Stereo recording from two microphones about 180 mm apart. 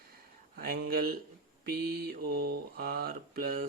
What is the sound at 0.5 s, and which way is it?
A man's voice, 55° right (ahead or behind).